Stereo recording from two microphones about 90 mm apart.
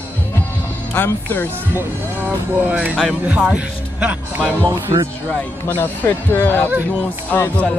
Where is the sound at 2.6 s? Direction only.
15° right (ahead or behind).